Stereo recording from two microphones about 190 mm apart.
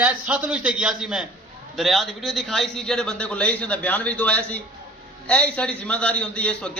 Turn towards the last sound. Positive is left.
turn(degrees=5)  # may be behind; listen again after turning